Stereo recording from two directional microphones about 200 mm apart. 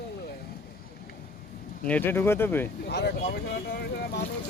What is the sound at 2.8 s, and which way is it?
Speech, 55° left (ahead or behind).